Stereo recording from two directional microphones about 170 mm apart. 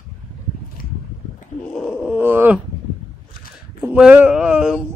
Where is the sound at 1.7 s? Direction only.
Centre (ahead or behind).